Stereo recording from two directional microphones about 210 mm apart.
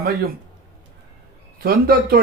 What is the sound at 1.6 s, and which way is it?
Speech, 45° right (ahead or behind).